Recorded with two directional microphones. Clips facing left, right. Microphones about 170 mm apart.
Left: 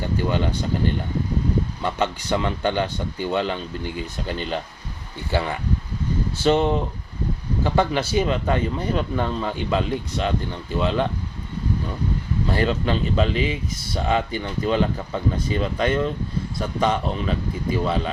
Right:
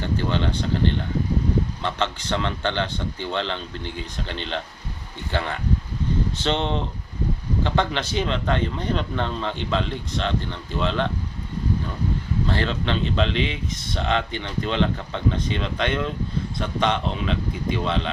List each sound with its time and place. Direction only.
0.0 s speech: 10° left (ahead or behind)
12.5 s speech: 10° left (ahead or behind)